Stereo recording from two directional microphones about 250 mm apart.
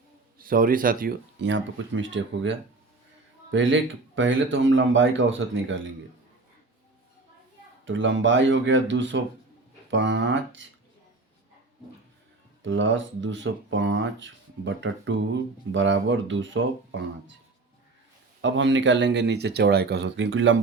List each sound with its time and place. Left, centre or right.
0.3 s speech: right
7.9 s speech: right
12.6 s speech: right
18.4 s speech: right